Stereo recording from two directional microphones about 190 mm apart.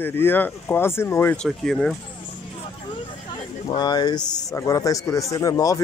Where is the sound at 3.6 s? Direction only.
20° left (ahead or behind).